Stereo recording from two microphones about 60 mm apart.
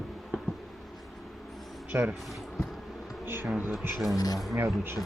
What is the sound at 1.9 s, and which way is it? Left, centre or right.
Speech, right.